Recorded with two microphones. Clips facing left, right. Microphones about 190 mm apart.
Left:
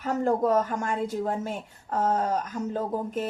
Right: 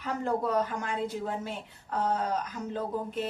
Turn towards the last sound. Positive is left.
turn(degrees=45)  # may be behind; listen again after turning